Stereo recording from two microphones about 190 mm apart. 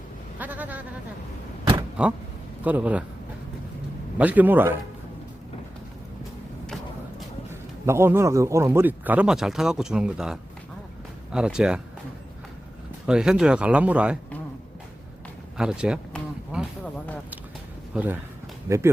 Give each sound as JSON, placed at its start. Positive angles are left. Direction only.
{"t": 0.3, "sound": "a sound", "side_deg": -10}
{"t": 2.0, "sound": "speech", "side_deg": -5}
{"t": 4.2, "sound": "speech", "side_deg": -10}
{"t": 7.9, "sound": "speech", "side_deg": -15}
{"t": 13.1, "sound": "speech", "side_deg": -5}
{"t": 15.5, "sound": "a sound", "side_deg": -5}
{"t": 17.9, "sound": "speech", "side_deg": -10}